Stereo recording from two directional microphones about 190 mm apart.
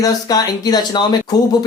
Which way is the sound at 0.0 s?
20° left (ahead or behind).